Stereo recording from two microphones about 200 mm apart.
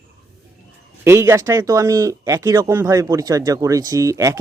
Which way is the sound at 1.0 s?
15° right (ahead or behind).